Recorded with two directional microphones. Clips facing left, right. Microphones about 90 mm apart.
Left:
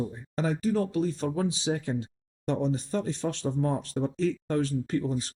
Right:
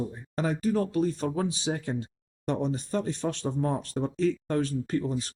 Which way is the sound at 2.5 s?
50° right (ahead or behind).